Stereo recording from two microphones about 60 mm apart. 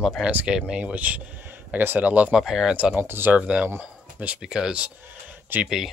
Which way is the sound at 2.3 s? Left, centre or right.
Centre.